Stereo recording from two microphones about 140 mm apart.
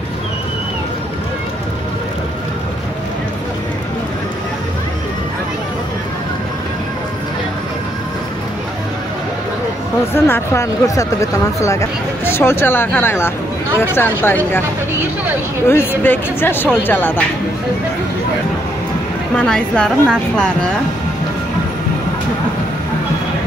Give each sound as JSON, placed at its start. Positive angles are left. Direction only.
{"t": 10.1, "sound": "speech", "side_deg": 15}
{"t": 15.7, "sound": "speech", "side_deg": 15}
{"t": 19.3, "sound": "speech", "side_deg": 5}